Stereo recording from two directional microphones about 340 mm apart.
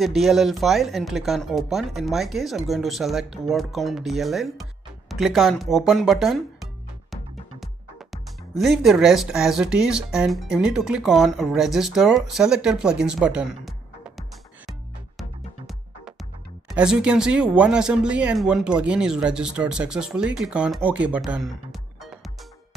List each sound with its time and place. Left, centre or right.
0.0 s speech: centre
14.7 s music: centre
16.6 s speech: centre